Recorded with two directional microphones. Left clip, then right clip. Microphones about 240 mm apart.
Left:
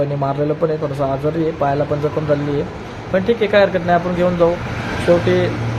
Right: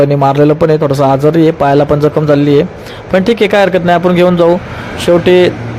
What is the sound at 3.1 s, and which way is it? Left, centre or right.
A man's voice, right.